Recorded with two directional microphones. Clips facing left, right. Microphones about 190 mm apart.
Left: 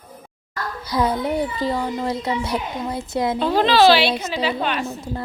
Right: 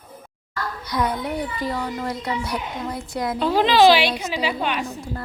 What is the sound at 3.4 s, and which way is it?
A woman's voice, 10° right (ahead or behind).